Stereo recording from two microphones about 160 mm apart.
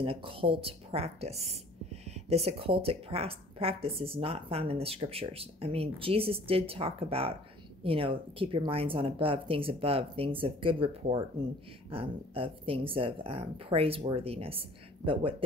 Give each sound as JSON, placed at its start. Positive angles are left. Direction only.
{"t": 0.0, "sound": "speech", "side_deg": -35}